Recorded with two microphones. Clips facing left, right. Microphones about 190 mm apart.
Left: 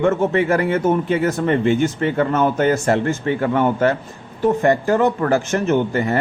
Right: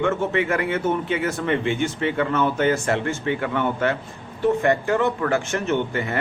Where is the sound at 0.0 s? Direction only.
40° left (ahead or behind).